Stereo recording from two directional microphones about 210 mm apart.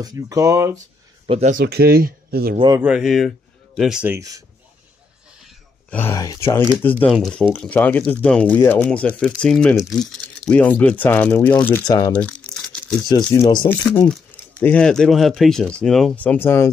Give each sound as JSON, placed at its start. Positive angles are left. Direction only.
{"t": 0.0, "sound": "speech", "side_deg": -15}
{"t": 1.2, "sound": "speech", "side_deg": -30}
{"t": 1.6, "sound": "speech", "side_deg": -50}
{"t": 2.8, "sound": "a man's voice", "side_deg": -5}
{"t": 5.4, "sound": "speech", "side_deg": 10}
{"t": 12.1, "sound": "crumpling", "side_deg": 5}
{"t": 13.1, "sound": "speech", "side_deg": 20}
{"t": 14.6, "sound": "speech", "side_deg": 5}